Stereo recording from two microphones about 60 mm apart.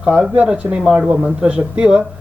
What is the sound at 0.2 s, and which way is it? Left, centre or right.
Speech, centre.